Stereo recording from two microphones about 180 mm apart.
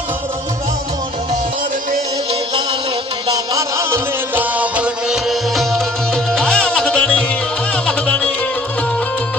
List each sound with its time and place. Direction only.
3.3 s music: 15° right (ahead or behind); by 8.3 s 5° left (ahead or behind)